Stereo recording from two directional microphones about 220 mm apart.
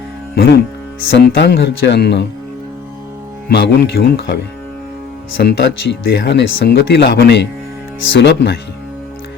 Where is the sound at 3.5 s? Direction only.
50° left (ahead or behind).